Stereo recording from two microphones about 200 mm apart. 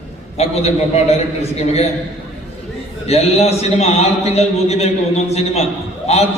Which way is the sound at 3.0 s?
30° left (ahead or behind).